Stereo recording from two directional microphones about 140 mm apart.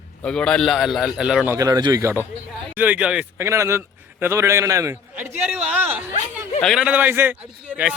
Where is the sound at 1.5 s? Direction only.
25° right (ahead or behind); by 3.4 s 10° right (ahead or behind).